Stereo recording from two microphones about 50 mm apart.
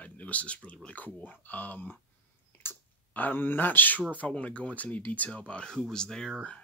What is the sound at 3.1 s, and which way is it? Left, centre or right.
Speech, left.